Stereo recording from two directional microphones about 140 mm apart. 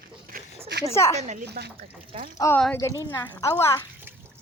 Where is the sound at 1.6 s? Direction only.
80° right.